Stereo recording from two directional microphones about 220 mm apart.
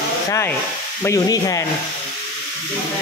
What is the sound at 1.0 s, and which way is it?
Sizzle, 15° left (ahead or behind).